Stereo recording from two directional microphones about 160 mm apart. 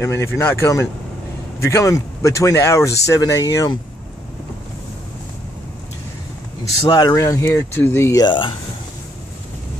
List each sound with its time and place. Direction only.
0.0 s speech: 15° left (ahead or behind)
6.9 s speech: 25° left (ahead or behind)